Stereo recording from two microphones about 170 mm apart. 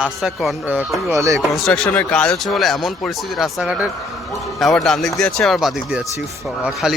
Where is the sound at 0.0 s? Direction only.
Centre (ahead or behind); by 1.4 s 20° right (ahead or behind).